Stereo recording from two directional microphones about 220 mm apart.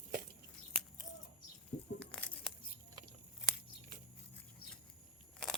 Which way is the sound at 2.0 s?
5° left (ahead or behind).